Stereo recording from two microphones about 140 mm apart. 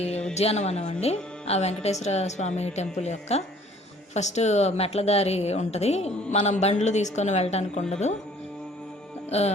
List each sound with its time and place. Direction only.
0.3 s a woman's voice: 50° left (ahead or behind)